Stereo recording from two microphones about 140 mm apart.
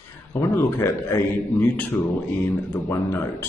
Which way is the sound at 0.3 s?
20° left (ahead or behind).